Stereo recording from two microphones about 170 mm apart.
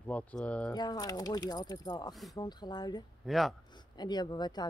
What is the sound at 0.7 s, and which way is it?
Speech, 25° left (ahead or behind).